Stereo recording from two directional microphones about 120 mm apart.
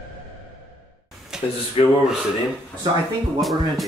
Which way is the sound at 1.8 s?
55° left (ahead or behind).